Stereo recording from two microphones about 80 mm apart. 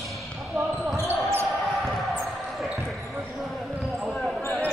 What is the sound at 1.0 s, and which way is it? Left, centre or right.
Basketball bounce, right.